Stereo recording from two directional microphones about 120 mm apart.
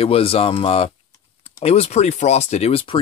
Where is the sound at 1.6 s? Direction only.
60° left (ahead or behind).